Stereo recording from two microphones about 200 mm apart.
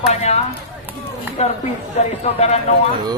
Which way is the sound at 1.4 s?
35° left (ahead or behind).